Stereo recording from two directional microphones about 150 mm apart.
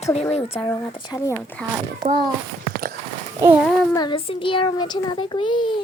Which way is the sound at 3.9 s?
30° left (ahead or behind).